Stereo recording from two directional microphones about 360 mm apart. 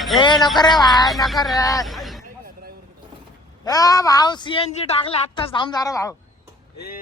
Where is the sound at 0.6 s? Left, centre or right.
Centre.